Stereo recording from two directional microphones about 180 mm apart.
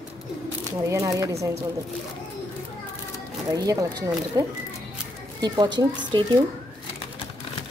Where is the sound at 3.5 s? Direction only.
20° right (ahead or behind).